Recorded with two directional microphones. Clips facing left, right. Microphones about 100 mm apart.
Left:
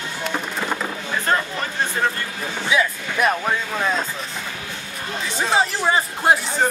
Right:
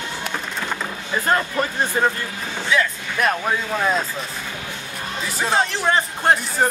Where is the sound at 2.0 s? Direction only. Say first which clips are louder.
Right 3 dB; 20° right (ahead or behind).